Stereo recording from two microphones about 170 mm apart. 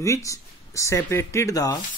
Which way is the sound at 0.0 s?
20° left (ahead or behind).